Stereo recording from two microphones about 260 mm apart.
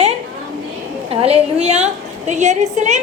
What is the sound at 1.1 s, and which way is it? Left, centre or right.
A woman's voice, right.